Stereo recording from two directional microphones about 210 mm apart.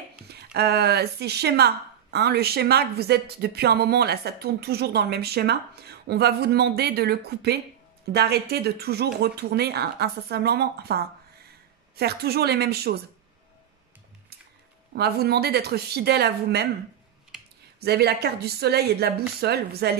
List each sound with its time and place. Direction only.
0.3 s speech: 50° right (ahead or behind)
12.0 s speech: 50° right (ahead or behind)
15.0 s speech: 50° right (ahead or behind)
17.7 s speech: 50° right (ahead or behind)